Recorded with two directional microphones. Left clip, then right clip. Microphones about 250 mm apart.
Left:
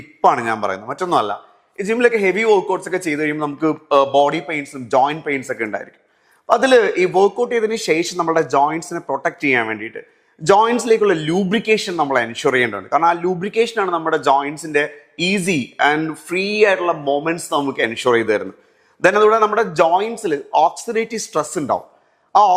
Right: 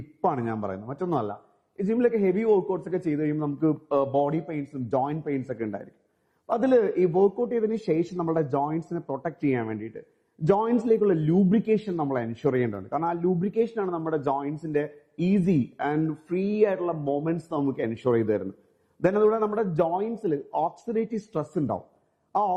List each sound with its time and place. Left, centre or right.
0.3 s a man's voice: centre
7.2 s speech: left
7.4 s a man's voice: centre
22.3 s a man's voice: centre